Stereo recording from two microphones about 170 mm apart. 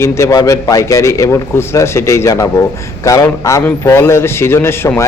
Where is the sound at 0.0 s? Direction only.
15° left (ahead or behind).